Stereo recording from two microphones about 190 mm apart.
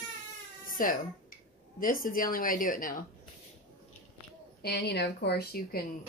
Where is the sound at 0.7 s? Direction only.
45° left (ahead or behind).